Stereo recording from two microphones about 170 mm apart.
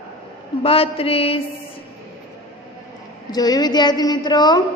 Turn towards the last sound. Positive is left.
turn(degrees=25)  # may be behind; listen again after turning